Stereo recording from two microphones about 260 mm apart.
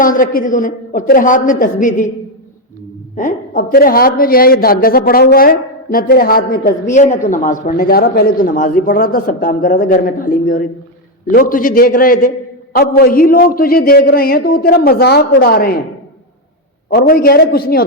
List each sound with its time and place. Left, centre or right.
0.0 s a man's voice: left
3.2 s a man's voice: left
16.9 s a man's voice: left